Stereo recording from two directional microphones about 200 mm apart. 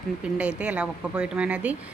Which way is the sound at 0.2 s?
5° right (ahead or behind).